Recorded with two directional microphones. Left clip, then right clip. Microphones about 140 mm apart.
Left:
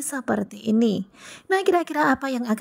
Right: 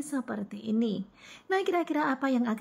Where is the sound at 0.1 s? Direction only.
45° left (ahead or behind).